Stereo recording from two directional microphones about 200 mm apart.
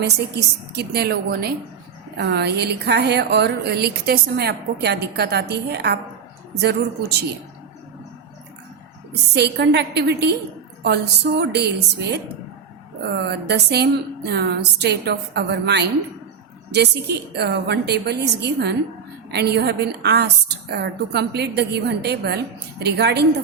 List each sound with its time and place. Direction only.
0.0 s a woman's voice: 55° right (ahead or behind)
9.3 s speech: 55° right (ahead or behind)